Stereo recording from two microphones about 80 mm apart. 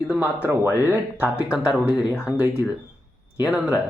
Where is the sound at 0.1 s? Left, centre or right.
Right.